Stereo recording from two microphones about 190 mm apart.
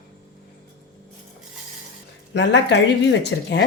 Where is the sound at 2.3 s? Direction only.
70° left (ahead or behind).